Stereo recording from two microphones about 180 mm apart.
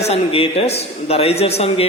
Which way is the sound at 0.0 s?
35° left (ahead or behind).